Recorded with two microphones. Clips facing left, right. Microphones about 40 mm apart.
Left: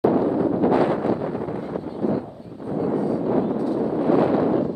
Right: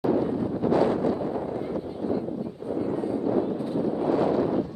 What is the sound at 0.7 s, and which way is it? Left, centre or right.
Wind noise, left.